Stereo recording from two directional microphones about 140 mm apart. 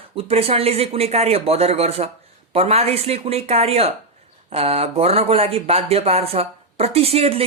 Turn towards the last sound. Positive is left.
turn(degrees=-45)  # may be behind; listen again after turning